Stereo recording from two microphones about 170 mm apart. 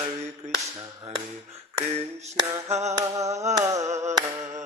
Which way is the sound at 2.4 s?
15° right (ahead or behind).